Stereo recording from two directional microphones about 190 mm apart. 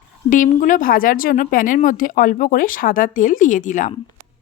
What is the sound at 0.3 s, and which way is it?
A woman's voice, 45° left (ahead or behind).